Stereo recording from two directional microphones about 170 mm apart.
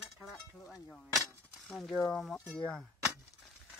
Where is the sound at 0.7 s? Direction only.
Centre (ahead or behind).